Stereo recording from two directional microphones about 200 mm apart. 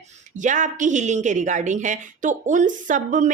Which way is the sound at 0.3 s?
40° right (ahead or behind).